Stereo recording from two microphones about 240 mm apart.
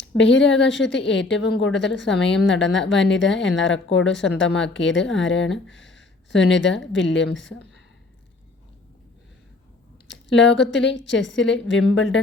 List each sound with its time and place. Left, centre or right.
0.2 s a woman's voice: left
10.1 s a woman's voice: left